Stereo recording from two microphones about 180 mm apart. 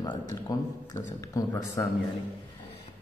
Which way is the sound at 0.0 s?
20° left (ahead or behind).